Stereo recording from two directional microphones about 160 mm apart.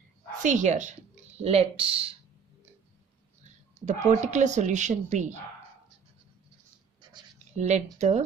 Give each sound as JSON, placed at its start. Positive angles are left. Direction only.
{"t": 0.4, "sound": "speech", "side_deg": -50}
{"t": 3.8, "sound": "speech", "side_deg": -45}
{"t": 7.0, "sound": "a sound", "side_deg": -30}
{"t": 7.5, "sound": "speech", "side_deg": -45}